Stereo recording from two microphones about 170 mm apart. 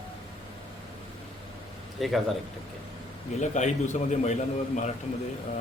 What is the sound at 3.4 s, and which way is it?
A man's voice, 45° left (ahead or behind).